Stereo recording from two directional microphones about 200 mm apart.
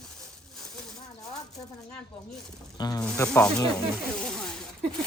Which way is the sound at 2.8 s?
20° left (ahead or behind).